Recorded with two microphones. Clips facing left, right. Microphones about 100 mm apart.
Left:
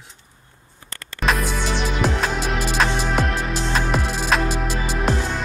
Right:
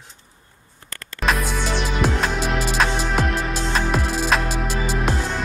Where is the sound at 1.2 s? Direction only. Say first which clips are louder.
Even; centre (ahead or behind).